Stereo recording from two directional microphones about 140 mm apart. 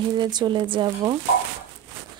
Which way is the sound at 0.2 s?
30° right (ahead or behind).